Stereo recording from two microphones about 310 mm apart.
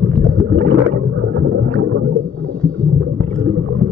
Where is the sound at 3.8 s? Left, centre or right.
Centre.